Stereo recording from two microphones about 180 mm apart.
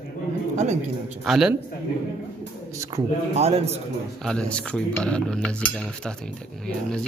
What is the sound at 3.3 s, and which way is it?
Speech, 35° right (ahead or behind).